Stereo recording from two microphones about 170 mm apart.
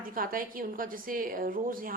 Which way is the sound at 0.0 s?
55° right (ahead or behind).